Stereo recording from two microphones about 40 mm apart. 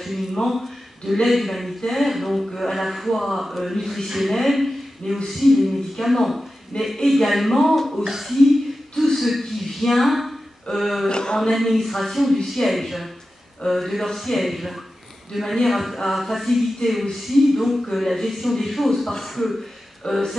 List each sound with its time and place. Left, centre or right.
0.0 s speech: centre
6.7 s speech: centre
7.1 s speech: centre
8.0 s speech: centre
8.9 s a sound: centre
11.1 s a sound: left
11.5 s speech: centre
20.1 s speech: centre